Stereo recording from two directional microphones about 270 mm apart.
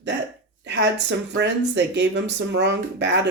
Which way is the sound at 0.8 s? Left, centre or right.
Right.